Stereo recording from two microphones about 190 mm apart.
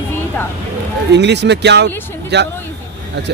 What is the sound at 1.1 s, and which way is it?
Speech, 65° right (ahead or behind).